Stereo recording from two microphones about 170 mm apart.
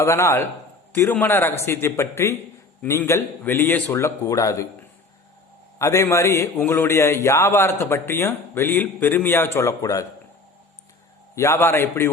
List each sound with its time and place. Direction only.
0.0 s speech: 15° left (ahead or behind)
5.8 s speech: 15° left (ahead or behind)
11.3 s speech: 15° left (ahead or behind)